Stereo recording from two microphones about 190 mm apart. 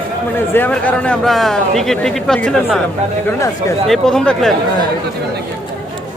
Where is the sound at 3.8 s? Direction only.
Centre (ahead or behind).